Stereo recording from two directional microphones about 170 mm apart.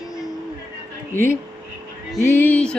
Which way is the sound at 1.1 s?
15° left (ahead or behind).